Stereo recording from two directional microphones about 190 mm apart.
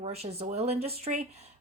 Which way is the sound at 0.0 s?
35° right (ahead or behind).